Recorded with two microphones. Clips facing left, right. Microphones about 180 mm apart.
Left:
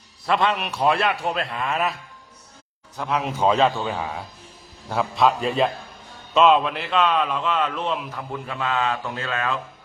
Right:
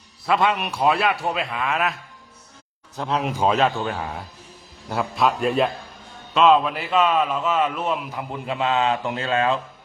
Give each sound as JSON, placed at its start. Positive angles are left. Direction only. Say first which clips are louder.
{"t": 0.3, "sound": "a man's voice", "louder": "right 1 dB", "side_deg": -5}
{"t": 2.9, "sound": "a man's voice", "louder": "right 1 dB", "side_deg": -15}
{"t": 8.3, "sound": "a man's voice", "louder": "right 4 dB", "side_deg": -20}